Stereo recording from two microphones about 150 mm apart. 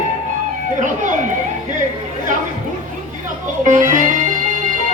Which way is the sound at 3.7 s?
60° right (ahead or behind).